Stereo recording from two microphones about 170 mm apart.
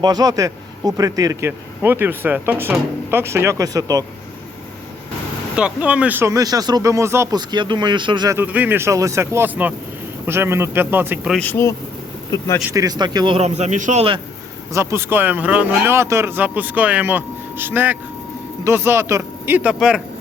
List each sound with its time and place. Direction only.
0.0 s speech: 25° right (ahead or behind)
5.5 s speech: 5° right (ahead or behind); by 8.4 s 25° right (ahead or behind)
8.4 s speech: 10° right (ahead or behind)
11.3 s speech: 10° left (ahead or behind)
12.7 s speech: 20° right (ahead or behind); by 14.0 s 45° right (ahead or behind)
14.7 s speech: 15° right (ahead or behind)